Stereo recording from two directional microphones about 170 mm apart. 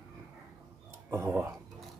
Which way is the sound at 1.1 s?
15° right (ahead or behind).